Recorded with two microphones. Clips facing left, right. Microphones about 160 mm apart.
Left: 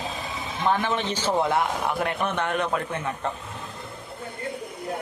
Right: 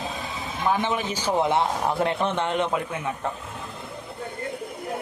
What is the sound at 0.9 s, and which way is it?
A man's voice, 10° right (ahead or behind).